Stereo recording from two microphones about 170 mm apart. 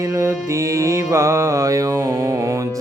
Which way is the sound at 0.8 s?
15° right (ahead or behind).